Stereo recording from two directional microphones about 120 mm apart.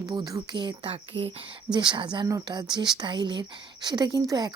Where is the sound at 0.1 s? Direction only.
35° right (ahead or behind).